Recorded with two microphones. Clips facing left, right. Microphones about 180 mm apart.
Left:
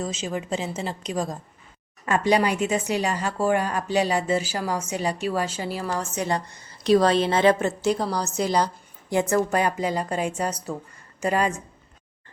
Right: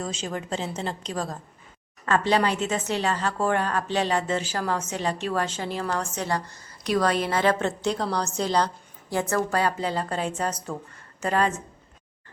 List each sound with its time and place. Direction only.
0.0 s a woman's voice: 5° left (ahead or behind)
6.2 s speech: 20° left (ahead or behind)
7.6 s speech: 5° left (ahead or behind)